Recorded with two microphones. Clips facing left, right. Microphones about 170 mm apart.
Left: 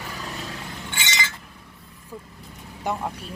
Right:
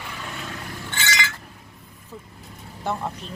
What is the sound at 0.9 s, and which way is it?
Chink, 20° left (ahead or behind).